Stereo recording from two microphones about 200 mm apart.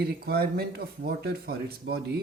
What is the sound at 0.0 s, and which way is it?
Speech, 50° right (ahead or behind).